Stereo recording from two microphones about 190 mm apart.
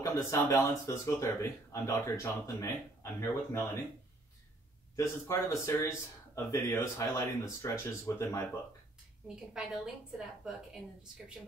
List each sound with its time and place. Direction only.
0.0 s speech: 15° left (ahead or behind)
4.9 s speech: 15° left (ahead or behind)
9.6 s a woman's voice: 5° right (ahead or behind)